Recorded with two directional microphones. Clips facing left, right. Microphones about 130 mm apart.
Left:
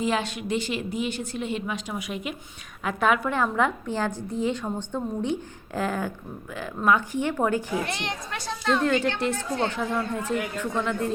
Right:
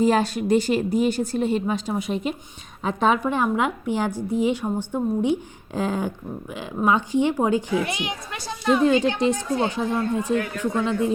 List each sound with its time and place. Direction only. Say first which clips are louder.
0.0 s speech: right 7 dB; 40° right (ahead or behind); by 11.1 s 15° right (ahead or behind)